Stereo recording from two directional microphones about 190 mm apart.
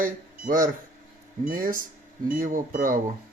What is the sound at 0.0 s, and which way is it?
A man's voice, 45° right (ahead or behind).